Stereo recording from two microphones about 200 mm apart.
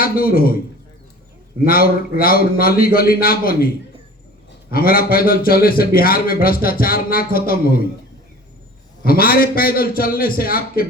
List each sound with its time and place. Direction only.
0.0 s a man's voice: 45° left (ahead or behind)
1.6 s a man's voice: 50° left (ahead or behind)
4.7 s a man's voice: 50° left (ahead or behind)
9.0 s a man's voice: 45° left (ahead or behind)